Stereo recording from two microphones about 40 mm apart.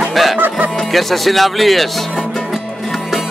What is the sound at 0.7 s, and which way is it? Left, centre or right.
Speech, centre.